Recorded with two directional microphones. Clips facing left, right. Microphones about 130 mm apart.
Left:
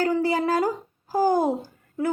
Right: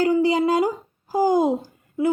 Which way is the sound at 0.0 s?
15° right (ahead or behind).